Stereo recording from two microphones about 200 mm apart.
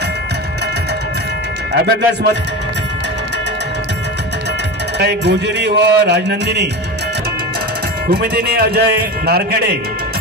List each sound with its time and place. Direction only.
1.7 s a man's voice: 60° right (ahead or behind)
4.9 s a man's voice: 60° right (ahead or behind)
8.1 s a man's voice: 50° right (ahead or behind)